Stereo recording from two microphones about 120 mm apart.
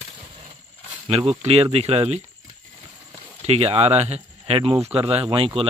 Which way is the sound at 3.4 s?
60° right (ahead or behind).